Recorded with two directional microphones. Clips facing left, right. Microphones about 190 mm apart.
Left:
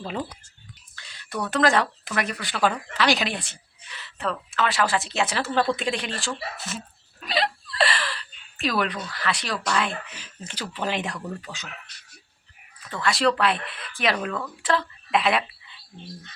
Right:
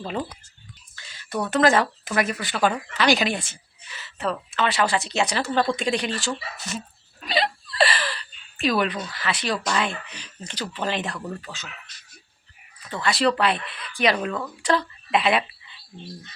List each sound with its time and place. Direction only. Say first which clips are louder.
0.9 s whispering: right 4 dB; centre (ahead or behind)
1.5 s a woman's voice: right 2 dB; centre (ahead or behind); by 11.7 s 15° left (ahead or behind)
11.7 s a sound: left 2 dB; 65° left (ahead or behind)
12.9 s a woman's voice: right 1 dB; centre (ahead or behind)